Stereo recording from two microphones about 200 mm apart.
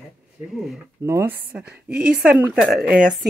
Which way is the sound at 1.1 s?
10° right (ahead or behind).